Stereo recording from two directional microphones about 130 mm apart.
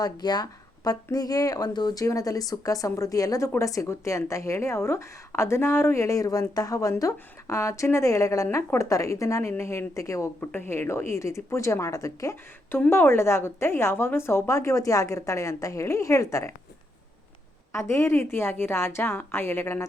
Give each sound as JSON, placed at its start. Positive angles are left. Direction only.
{"t": 0.0, "sound": "speech", "side_deg": 30}
{"t": 17.7, "sound": "speech", "side_deg": 20}